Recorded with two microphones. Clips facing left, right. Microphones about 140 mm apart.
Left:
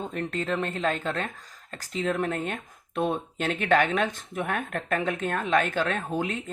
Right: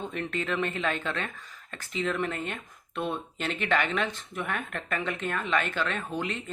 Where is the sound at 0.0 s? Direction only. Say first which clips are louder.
Left 2 dB; 40° left (ahead or behind).